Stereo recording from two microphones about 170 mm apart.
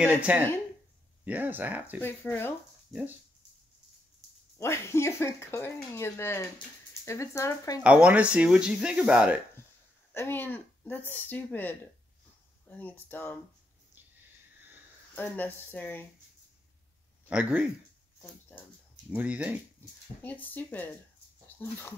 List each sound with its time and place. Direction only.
0.0 s speech: 10° right (ahead or behind)
2.0 s speech: 10° left (ahead or behind)
2.9 s speech: 5° right (ahead or behind)
4.6 s speech: 15° left (ahead or behind)
7.8 s speech: 5° right (ahead or behind)
10.1 s speech: 15° left (ahead or behind)
15.1 s speech: 10° left (ahead or behind)
17.3 s speech: 5° right (ahead or behind)
19.0 s speech: 10° right (ahead or behind)
20.2 s speech: 10° left (ahead or behind)